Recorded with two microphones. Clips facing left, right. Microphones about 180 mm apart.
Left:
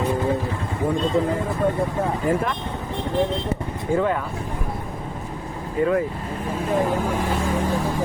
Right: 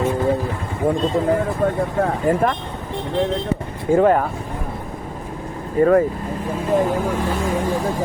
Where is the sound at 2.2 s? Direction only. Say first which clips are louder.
Right 4 dB; 50° right (ahead or behind).